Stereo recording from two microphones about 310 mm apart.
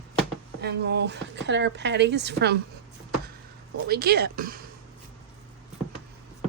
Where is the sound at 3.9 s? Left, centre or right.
Right.